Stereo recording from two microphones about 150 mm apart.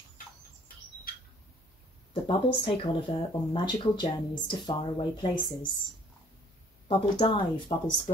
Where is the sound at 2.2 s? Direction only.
35° left (ahead or behind).